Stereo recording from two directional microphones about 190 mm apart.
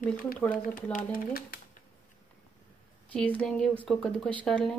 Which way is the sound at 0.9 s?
50° left (ahead or behind).